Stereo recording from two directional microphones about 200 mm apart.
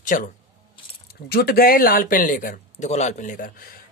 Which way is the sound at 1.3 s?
50° left (ahead or behind).